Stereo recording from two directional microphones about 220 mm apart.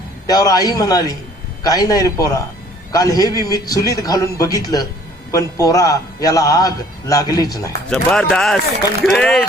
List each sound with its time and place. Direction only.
0.3 s a man's voice: 15° left (ahead or behind)
7.9 s speech: 5° left (ahead or behind)